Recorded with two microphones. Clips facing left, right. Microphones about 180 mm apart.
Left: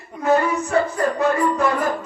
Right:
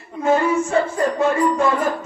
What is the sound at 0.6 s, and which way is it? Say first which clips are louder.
Music: right 1 dB; 25° right (ahead or behind).